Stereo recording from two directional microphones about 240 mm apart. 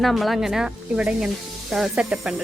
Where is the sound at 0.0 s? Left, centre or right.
Centre.